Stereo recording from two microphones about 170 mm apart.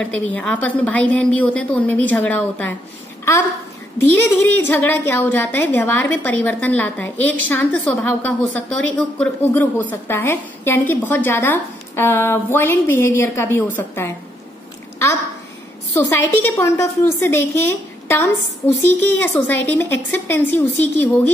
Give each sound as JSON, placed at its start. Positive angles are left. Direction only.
{"t": 0.0, "sound": "a woman's voice", "side_deg": 10}
{"t": 4.6, "sound": "a woman's voice", "side_deg": 10}
{"t": 15.9, "sound": "a woman's voice", "side_deg": 15}